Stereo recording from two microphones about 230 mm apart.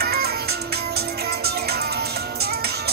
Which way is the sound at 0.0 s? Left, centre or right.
Right.